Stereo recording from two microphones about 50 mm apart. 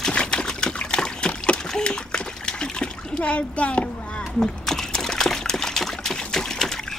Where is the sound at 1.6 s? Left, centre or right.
Centre.